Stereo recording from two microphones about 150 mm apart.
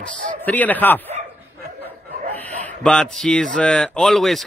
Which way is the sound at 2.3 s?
10° left (ahead or behind).